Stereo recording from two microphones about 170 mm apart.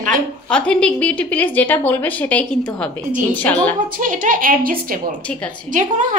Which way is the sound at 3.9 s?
50° right (ahead or behind).